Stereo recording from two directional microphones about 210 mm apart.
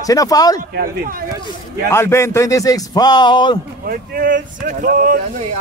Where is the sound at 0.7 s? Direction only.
45° right (ahead or behind).